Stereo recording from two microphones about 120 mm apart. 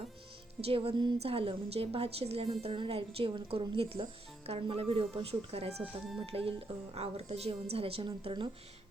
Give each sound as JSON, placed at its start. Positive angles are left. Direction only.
{"t": 0.6, "sound": "a woman's voice", "side_deg": -50}